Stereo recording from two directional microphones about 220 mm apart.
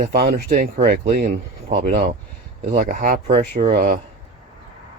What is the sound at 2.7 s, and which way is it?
Speech, 35° right (ahead or behind).